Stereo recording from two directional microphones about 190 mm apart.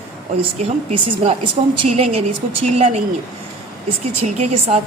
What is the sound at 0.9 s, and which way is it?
A woman's voice, 35° right (ahead or behind).